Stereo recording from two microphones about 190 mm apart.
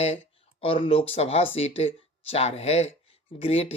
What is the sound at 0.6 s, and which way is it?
Speech, 30° left (ahead or behind).